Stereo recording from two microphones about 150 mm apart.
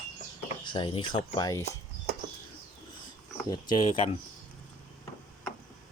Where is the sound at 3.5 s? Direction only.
25° left (ahead or behind).